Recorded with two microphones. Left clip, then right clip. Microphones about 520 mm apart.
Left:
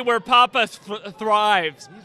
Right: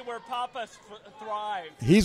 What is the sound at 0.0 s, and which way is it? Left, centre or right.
Speech, left.